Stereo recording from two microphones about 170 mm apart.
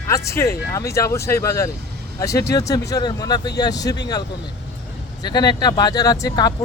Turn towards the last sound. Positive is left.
turn(degrees=20)  # may be behind; listen again after turning